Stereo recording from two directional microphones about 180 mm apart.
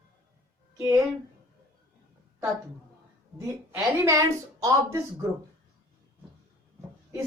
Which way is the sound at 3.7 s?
15° right (ahead or behind).